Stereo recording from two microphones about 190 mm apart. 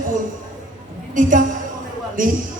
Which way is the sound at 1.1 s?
45° right (ahead or behind).